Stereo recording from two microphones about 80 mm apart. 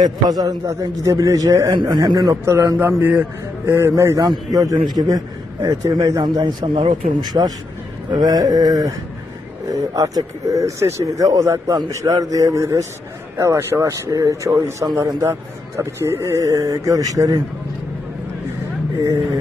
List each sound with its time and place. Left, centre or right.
0.0 s speech: right
1.8 s a man's voice: right
2.4 s a man's voice: right
3.7 s a man's voice: right
5.6 s speech: right
6.4 s speech: right
7.3 s a man's voice: right